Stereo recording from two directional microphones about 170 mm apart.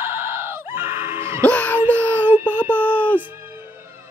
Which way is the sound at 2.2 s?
10° right (ahead or behind).